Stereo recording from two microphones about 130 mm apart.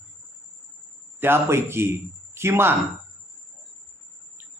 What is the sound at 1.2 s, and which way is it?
A man's voice, 20° right (ahead or behind).